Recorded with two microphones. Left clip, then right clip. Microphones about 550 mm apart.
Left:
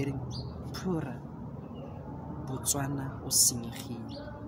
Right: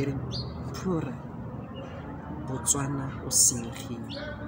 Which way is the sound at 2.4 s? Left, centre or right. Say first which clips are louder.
Right 4 dB; left.